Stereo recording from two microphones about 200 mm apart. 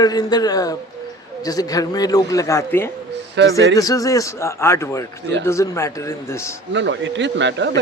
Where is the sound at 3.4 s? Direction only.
60° right (ahead or behind).